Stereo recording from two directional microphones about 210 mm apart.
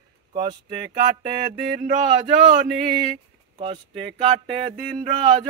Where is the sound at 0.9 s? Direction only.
40° right (ahead or behind).